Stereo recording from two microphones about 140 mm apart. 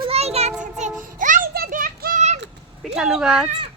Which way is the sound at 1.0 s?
70° right (ahead or behind).